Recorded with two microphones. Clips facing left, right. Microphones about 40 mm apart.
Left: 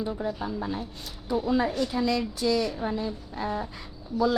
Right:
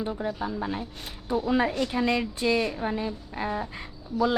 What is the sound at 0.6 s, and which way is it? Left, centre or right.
A woman's voice, right.